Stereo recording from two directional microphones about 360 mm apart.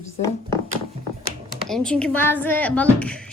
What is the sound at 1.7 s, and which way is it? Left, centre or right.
A woman's voice, centre.